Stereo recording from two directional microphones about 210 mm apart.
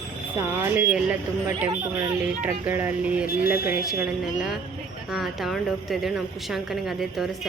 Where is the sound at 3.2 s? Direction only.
45° left (ahead or behind).